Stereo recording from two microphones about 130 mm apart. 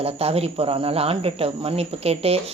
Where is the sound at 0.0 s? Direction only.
50° right (ahead or behind).